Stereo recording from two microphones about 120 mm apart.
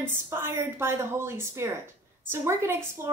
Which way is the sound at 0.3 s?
20° right (ahead or behind).